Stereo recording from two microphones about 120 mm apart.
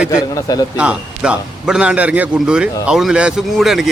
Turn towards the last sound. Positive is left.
turn(degrees=-5)  # may be behind; listen again after turning